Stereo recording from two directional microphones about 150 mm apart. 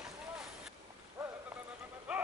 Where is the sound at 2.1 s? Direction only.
5° right (ahead or behind).